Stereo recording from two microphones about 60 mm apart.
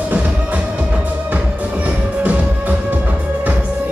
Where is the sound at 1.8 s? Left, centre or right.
Right.